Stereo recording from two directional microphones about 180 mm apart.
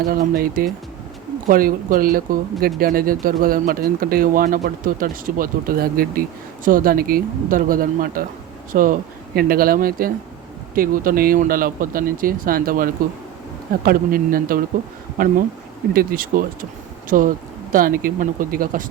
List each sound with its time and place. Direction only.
0.0 s speech: 55° right (ahead or behind)